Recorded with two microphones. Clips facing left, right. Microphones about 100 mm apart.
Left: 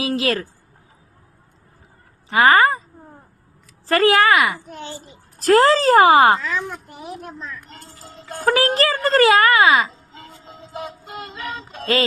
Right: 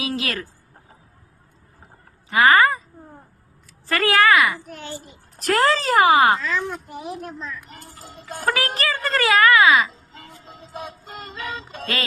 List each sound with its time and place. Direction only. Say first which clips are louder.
0.2 s a child's voice: left 7 dB; 30° left (ahead or behind)
2.3 s a child's voice: left 1 dB; 30° left (ahead or behind)
3.8 s a child's voice: left 3 dB; 30° left (ahead or behind)
6.4 s a woman's voice: even; 15° left (ahead or behind)
6.7 s speech: right 2 dB; centre (ahead or behind)
8.4 s speech: left 6 dB; 30° left (ahead or behind)
9.9 s synthetic singing: left 2 dB; centre (ahead or behind)